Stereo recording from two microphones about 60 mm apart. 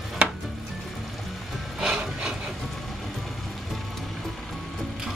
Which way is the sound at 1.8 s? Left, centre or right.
Centre.